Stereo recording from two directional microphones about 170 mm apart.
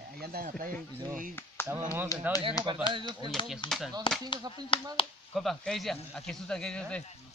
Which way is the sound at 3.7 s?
Centre (ahead or behind).